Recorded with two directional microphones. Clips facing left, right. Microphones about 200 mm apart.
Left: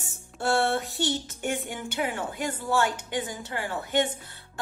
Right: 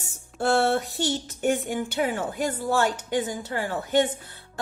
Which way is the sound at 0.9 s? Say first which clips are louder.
Right 2 dB; 45° right (ahead or behind).